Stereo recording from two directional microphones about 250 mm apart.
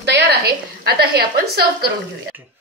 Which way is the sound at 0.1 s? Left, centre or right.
Right.